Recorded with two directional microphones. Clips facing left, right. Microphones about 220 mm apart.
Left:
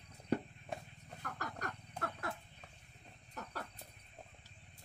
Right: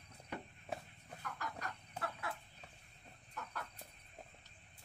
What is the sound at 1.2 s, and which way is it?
Chicken, 45° left (ahead or behind).